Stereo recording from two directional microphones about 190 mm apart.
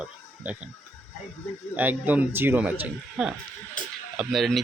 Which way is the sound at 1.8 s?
10° right (ahead or behind).